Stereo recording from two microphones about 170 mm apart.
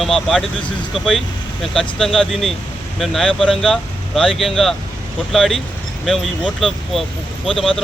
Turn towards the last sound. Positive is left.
turn(degrees=0)  # may be behind; listen again after turning